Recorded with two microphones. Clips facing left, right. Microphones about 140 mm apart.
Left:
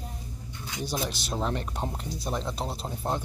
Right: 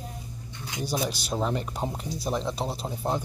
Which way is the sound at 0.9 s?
Centre (ahead or behind).